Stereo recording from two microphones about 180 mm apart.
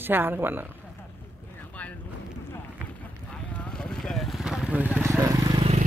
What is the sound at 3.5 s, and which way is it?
Vehicle, 5° left (ahead or behind).